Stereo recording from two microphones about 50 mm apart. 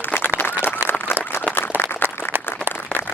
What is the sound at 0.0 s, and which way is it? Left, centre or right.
Applause, left.